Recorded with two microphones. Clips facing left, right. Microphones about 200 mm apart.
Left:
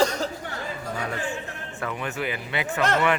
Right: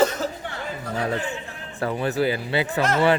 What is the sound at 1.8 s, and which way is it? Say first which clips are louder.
Speech: right 7 dB; 35° right (ahead or behind).